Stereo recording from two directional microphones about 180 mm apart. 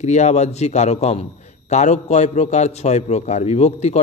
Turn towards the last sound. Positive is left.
turn(degrees=35)  # may be behind; listen again after turning